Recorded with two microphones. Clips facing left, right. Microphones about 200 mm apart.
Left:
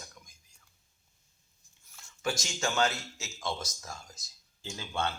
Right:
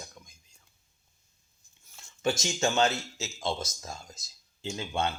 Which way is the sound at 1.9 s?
25° right (ahead or behind).